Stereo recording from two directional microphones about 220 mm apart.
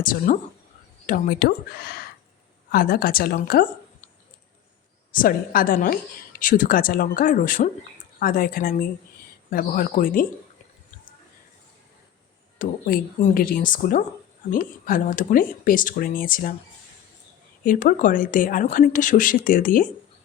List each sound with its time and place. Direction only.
0.0 s speech: 40° left (ahead or behind)
5.1 s speech: 40° left (ahead or behind)
12.5 s speech: 40° left (ahead or behind)
17.6 s speech: 40° left (ahead or behind)